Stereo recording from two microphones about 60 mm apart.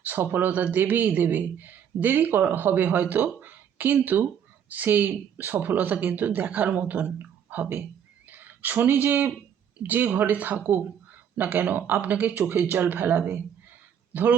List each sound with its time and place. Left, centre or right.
0.0 s speech: right